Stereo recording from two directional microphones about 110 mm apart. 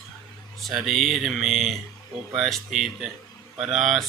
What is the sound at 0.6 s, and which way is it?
Speech, centre (ahead or behind).